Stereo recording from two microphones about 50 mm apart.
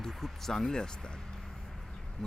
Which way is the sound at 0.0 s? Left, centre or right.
Centre.